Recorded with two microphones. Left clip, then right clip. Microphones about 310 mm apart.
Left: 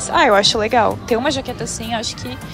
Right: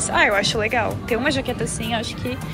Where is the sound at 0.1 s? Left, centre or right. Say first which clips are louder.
Left 5 dB; centre.